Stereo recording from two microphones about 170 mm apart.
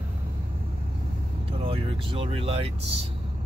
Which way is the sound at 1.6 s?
30° right (ahead or behind).